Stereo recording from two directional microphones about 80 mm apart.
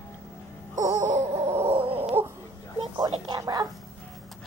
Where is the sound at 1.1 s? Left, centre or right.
Right.